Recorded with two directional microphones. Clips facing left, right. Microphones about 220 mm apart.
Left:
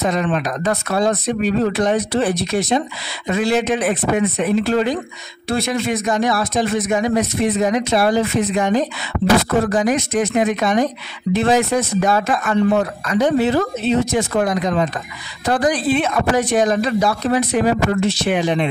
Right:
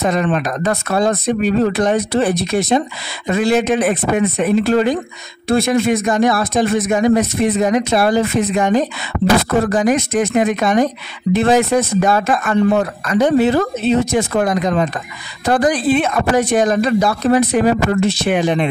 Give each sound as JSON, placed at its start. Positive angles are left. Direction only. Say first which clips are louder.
{"t": 0.0, "sound": "speech", "louder": "right 2 dB", "side_deg": -50}